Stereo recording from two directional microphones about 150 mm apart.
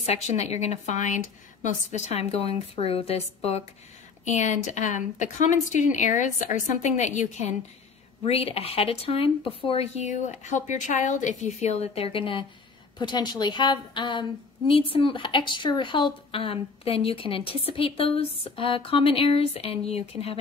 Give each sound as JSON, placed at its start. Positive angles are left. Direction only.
{"t": 0.0, "sound": "speech", "side_deg": 45}